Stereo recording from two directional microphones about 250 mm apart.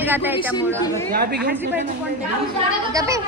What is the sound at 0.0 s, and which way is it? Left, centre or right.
Speech, centre.